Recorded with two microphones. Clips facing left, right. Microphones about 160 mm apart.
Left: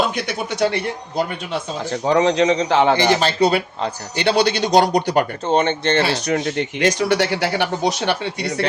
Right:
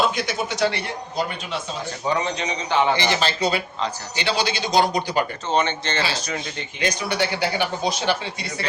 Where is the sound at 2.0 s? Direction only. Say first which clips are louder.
Left 9 dB; 90° left.